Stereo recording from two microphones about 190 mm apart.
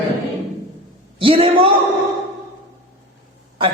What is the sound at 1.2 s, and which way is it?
Speech, 30° right (ahead or behind).